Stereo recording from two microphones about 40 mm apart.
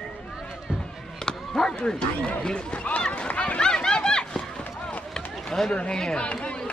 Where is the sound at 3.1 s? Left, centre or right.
Left.